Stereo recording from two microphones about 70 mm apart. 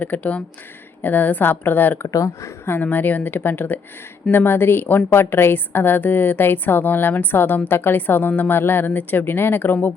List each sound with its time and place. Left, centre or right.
0.0 s a woman's voice: left
2.0 s speech: left
2.8 s a woman's voice: left